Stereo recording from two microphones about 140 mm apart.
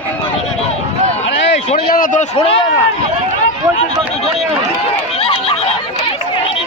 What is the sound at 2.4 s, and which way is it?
Speech, 40° left (ahead or behind).